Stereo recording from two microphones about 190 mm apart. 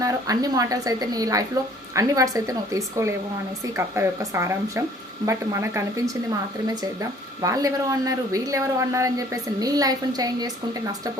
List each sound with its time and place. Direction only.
0.0 s a woman's voice: 20° right (ahead or behind)